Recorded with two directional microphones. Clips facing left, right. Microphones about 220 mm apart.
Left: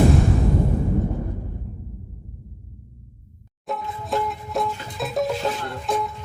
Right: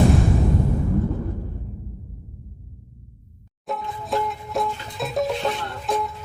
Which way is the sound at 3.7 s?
Centre (ahead or behind).